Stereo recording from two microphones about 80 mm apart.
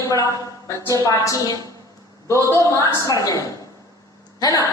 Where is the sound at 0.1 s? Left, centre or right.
Left.